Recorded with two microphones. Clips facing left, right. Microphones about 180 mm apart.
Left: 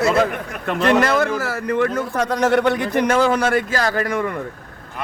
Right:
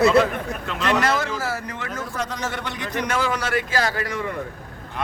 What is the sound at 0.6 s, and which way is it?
Speech, 55° left (ahead or behind).